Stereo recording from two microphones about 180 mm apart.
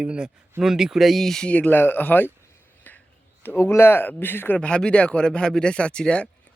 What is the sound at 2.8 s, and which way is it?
Finger snapping, 10° left (ahead or behind).